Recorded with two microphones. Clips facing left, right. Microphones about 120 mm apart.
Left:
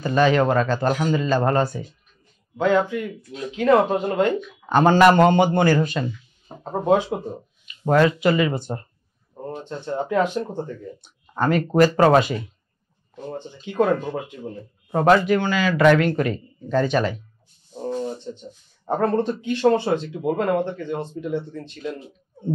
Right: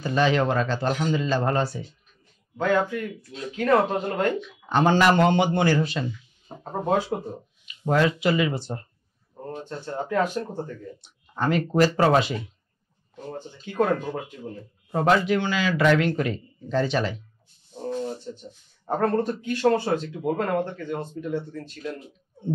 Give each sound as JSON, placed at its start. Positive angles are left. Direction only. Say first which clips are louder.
{"t": 0.0, "sound": "a man's voice", "louder": "left 4 dB", "side_deg": 50}
{"t": 2.5, "sound": "speech", "louder": "left 3 dB", "side_deg": 15}
{"t": 4.4, "sound": "a man's voice", "louder": "left 4 dB", "side_deg": 50}
{"t": 6.6, "sound": "speech", "louder": "left 5 dB", "side_deg": 20}
{"t": 7.6, "sound": "a man's voice", "louder": "left 4 dB", "side_deg": 50}
{"t": 9.6, "sound": "speech", "louder": "left 4 dB", "side_deg": 20}
{"t": 11.0, "sound": "a man's voice", "louder": "left 4 dB", "side_deg": 50}
{"t": 13.3, "sound": "speech", "louder": "left 3 dB", "side_deg": 15}
{"t": 14.9, "sound": "a man's voice", "louder": "left 4 dB", "side_deg": 55}
{"t": 17.8, "sound": "a sound", "louder": "left 2 dB", "side_deg": 20}
{"t": 18.9, "sound": "speech", "louder": "left 2 dB", "side_deg": 20}